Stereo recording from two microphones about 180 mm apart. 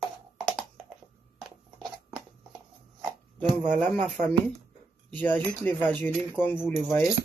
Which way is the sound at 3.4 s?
25° right (ahead or behind).